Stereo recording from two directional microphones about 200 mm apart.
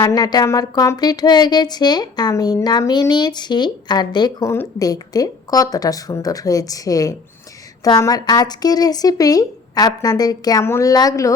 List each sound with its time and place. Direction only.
0.0 s speech: 20° left (ahead or behind)